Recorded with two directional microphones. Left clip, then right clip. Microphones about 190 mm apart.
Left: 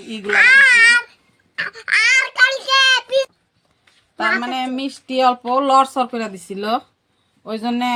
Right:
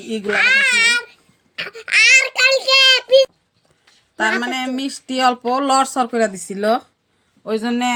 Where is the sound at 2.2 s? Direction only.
50° left (ahead or behind).